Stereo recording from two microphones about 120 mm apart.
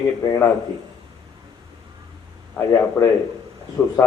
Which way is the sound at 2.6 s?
20° left (ahead or behind).